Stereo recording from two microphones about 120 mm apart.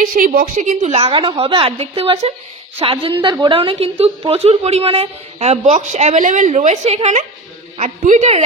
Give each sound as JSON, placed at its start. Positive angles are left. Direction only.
{"t": 0.0, "sound": "a woman's voice", "side_deg": -90}
{"t": 2.8, "sound": "a woman's voice", "side_deg": -45}
{"t": 7.7, "sound": "a woman's voice", "side_deg": -90}